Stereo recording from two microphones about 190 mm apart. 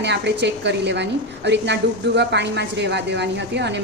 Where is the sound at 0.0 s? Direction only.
65° right (ahead or behind).